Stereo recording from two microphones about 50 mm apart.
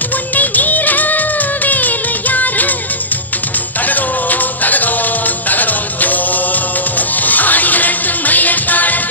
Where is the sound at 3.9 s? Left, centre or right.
Left.